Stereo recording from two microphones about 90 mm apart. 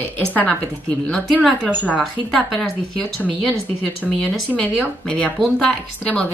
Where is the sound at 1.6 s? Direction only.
15° right (ahead or behind).